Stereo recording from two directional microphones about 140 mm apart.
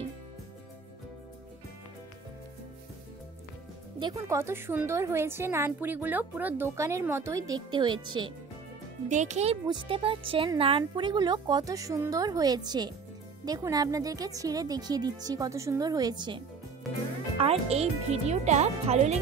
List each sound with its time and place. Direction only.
4.0 s a woman's voice: 25° right (ahead or behind)
9.1 s speech: 55° right (ahead or behind)
9.7 s a woman's voice: 35° right (ahead or behind)
17.4 s speech: 45° right (ahead or behind)